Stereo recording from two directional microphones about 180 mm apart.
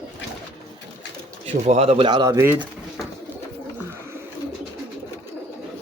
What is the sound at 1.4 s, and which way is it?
Speech, 35° right (ahead or behind).